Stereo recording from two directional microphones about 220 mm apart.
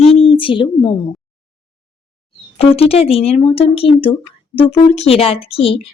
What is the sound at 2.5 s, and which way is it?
Speech, 25° left (ahead or behind).